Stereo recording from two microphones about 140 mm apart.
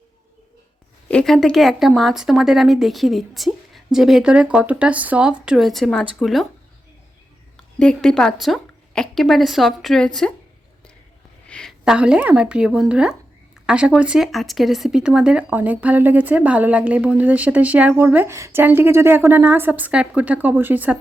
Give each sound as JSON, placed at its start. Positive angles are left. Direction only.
{"t": 1.0, "sound": "speech", "side_deg": 5}
{"t": 7.5, "sound": "a woman's voice", "side_deg": 5}
{"t": 11.4, "sound": "a sound", "side_deg": 5}
{"t": 11.9, "sound": "speech", "side_deg": -5}